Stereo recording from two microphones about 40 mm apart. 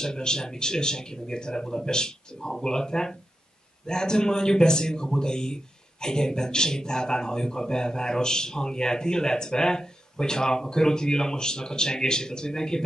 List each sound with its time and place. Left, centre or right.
0.0 s a man's voice: centre